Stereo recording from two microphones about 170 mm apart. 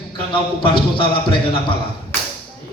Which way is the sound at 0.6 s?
30° left (ahead or behind).